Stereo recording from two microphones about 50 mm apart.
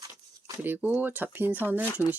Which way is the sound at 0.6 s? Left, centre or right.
Right.